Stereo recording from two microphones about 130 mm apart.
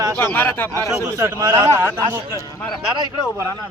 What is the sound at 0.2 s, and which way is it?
Speech, 15° left (ahead or behind).